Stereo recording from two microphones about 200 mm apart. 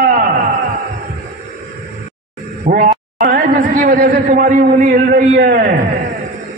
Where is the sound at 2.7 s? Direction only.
50° right (ahead or behind).